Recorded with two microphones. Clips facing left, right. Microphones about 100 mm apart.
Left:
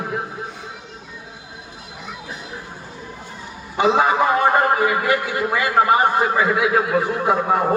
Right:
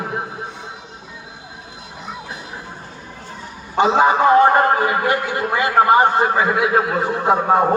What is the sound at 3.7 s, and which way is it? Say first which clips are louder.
A man's voice: right 2 dB; 25° right (ahead or behind).